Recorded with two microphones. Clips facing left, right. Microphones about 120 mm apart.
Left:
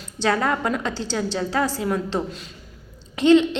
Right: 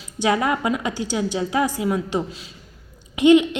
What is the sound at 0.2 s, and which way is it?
A woman's voice, 10° right (ahead or behind).